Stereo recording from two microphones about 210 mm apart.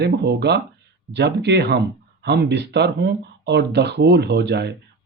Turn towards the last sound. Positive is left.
turn(degrees=-55)  # may be behind; listen again after turning